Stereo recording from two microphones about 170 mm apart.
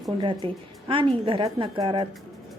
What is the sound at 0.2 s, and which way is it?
A woman's voice, 30° right (ahead or behind).